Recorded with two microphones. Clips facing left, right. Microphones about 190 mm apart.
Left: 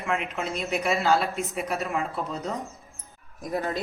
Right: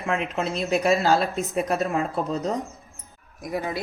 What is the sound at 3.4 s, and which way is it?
Speech, 10° right (ahead or behind).